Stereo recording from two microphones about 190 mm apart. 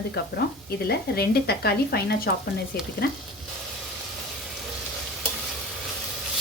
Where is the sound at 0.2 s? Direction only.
55° left (ahead or behind).